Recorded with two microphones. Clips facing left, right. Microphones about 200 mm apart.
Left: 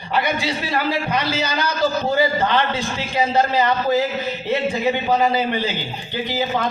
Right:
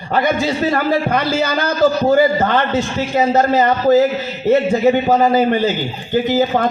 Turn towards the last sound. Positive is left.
turn(degrees=-50)  # may be behind; listen again after turning